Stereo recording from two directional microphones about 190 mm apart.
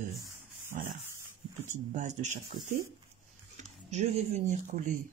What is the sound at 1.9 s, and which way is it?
Speech, 40° right (ahead or behind).